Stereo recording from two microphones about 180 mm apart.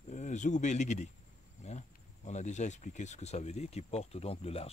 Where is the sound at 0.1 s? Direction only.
40° left (ahead or behind).